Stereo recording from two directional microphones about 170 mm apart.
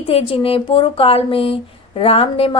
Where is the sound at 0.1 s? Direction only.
35° left (ahead or behind).